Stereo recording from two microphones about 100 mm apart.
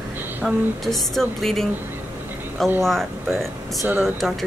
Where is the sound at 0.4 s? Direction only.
5° left (ahead or behind).